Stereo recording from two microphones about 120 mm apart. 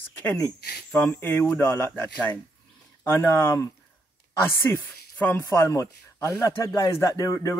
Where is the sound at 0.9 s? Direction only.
20° left (ahead or behind).